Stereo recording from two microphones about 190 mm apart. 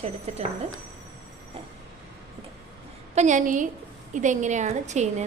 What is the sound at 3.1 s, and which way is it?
A woman's voice, 40° right (ahead or behind).